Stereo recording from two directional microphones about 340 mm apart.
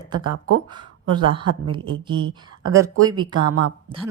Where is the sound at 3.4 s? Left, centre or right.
Right.